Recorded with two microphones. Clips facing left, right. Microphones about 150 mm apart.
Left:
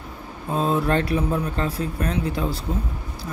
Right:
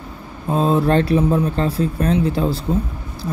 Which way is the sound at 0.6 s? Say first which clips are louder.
Right 5 dB; 30° right (ahead or behind).